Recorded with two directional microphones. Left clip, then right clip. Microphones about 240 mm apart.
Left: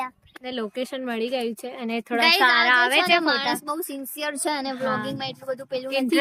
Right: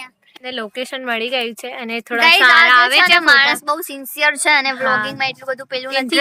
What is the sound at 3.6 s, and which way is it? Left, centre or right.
Speech, right.